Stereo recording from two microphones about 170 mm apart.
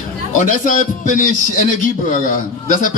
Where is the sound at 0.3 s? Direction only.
50° left (ahead or behind).